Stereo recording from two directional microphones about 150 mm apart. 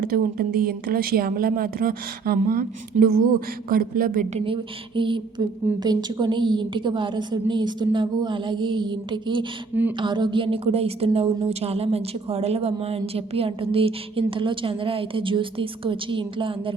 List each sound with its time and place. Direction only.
0.1 s a woman's voice: 90° right
3.0 s speech: 90° right
3.7 s a man's voice: 75° right (ahead or behind)
4.4 s a woman's voice: 35° right (ahead or behind)